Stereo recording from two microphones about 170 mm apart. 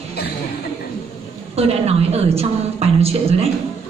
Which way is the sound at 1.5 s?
35° right (ahead or behind).